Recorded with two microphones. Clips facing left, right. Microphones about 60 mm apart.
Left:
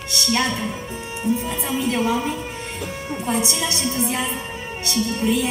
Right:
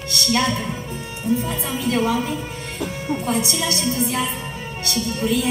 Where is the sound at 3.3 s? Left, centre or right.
Centre.